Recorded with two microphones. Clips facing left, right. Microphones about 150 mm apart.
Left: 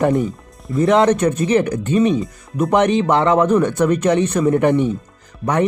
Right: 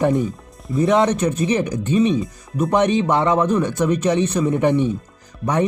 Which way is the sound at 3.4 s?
55° left (ahead or behind).